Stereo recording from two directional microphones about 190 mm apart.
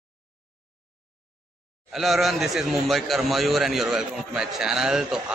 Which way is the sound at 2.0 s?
Centre (ahead or behind).